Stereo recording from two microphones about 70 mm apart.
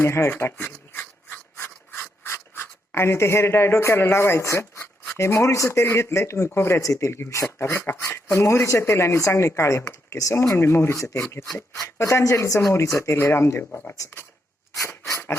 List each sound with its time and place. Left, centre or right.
0.0 s a sound: left
5.1 s speech: left
13.7 s speech: left
14.8 s dog: left